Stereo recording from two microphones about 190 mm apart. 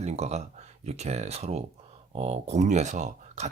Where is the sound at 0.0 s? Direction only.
35° right (ahead or behind).